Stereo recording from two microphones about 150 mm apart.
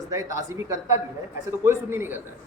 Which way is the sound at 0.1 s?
20° right (ahead or behind).